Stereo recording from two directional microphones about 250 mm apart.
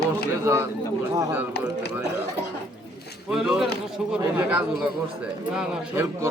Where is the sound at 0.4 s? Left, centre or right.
Centre.